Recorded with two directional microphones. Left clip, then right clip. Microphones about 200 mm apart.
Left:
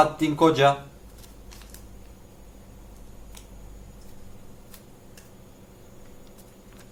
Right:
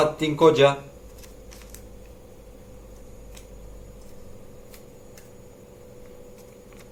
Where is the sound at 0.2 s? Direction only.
45° left (ahead or behind).